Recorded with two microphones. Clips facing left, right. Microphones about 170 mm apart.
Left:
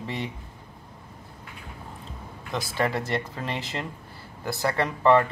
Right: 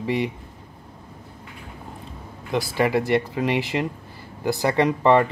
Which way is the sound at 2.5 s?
15° right (ahead or behind).